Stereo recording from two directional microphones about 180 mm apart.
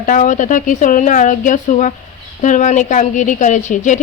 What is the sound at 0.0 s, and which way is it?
A woman's voice, 45° left (ahead or behind).